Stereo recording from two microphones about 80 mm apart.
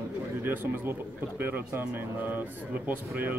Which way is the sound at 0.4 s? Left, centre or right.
Right.